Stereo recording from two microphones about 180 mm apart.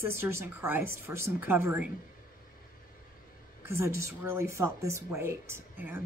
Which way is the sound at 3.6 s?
15° right (ahead or behind).